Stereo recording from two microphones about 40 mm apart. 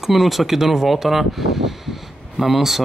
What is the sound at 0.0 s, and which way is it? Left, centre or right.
Speech, centre.